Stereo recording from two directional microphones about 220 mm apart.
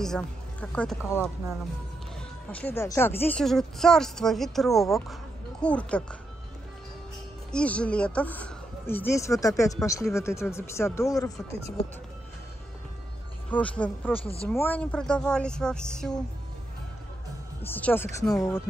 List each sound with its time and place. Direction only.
0.0 s speech: 5° left (ahead or behind)
7.5 s speech: 5° left (ahead or behind)
13.5 s speech: 5° left (ahead or behind)
14.1 s speech: 25° left (ahead or behind)
14.6 s speech: 5° left (ahead or behind)
17.6 s speech: 10° left (ahead or behind)